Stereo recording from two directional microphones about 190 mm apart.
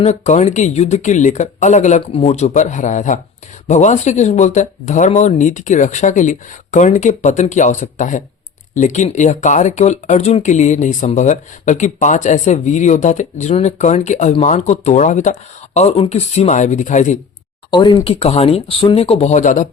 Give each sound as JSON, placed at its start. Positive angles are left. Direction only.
{"t": 0.0, "sound": "speech", "side_deg": 35}
{"t": 17.7, "sound": "speech", "side_deg": 25}